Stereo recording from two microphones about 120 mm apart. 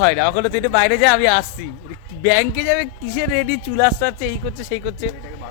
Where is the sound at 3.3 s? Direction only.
20° left (ahead or behind).